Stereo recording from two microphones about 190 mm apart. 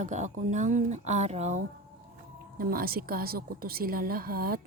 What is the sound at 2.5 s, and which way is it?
A woman's voice, 50° right (ahead or behind).